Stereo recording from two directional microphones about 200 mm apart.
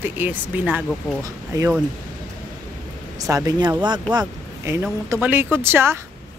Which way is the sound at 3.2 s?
15° right (ahead or behind).